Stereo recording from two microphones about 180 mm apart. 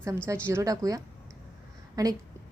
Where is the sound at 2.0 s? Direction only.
20° right (ahead or behind).